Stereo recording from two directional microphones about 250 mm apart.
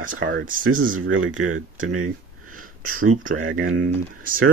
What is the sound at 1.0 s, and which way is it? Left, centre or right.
Speech, right.